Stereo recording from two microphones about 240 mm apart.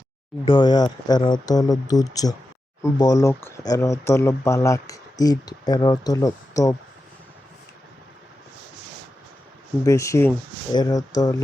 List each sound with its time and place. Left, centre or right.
0.4 s speech: centre
9.8 s speech: centre